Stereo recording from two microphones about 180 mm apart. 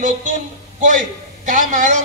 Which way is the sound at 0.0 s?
45° right (ahead or behind).